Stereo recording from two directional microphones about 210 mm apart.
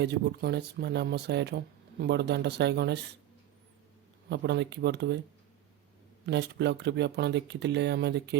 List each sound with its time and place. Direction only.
0.0 s speech: 50° right (ahead or behind)
4.3 s speech: 55° right (ahead or behind)
6.2 s speech: 55° right (ahead or behind)